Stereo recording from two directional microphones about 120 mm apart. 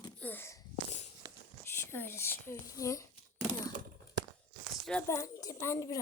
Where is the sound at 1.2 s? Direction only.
30° right (ahead or behind).